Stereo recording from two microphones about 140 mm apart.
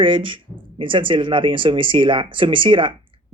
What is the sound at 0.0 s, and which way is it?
Speech, 35° right (ahead or behind).